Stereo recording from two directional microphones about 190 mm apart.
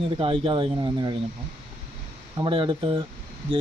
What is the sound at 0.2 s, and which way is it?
Speech, 30° right (ahead or behind).